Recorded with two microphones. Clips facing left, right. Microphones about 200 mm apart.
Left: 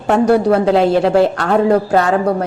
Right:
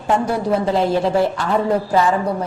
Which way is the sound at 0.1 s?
70° left (ahead or behind).